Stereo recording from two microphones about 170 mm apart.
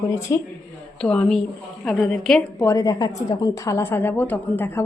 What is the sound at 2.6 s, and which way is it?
A woman's voice, 20° left (ahead or behind).